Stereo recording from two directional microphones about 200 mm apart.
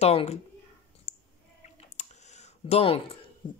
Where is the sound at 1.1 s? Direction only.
35° left (ahead or behind).